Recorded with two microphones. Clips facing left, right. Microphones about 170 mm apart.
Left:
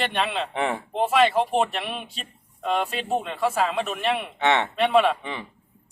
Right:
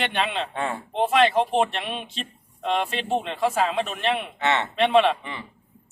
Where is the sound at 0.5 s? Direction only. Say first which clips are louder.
Left 3 dB; 15° left (ahead or behind).